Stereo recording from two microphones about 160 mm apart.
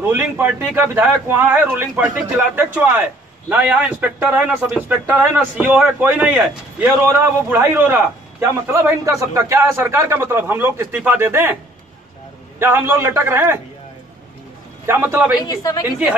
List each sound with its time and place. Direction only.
0.0 s a man's voice: 15° right (ahead or behind)
12.5 s a man's voice: 15° right (ahead or behind)
14.9 s a man's voice: 15° right (ahead or behind)
15.4 s a woman's voice: 25° left (ahead or behind)